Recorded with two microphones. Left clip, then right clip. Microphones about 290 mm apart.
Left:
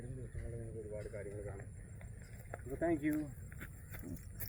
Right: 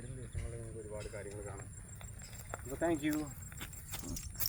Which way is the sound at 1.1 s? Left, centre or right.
Right.